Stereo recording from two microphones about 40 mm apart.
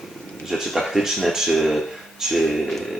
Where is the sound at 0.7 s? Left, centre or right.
Centre.